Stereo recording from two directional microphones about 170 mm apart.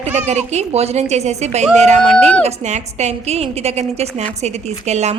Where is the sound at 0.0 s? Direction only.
40° right (ahead or behind).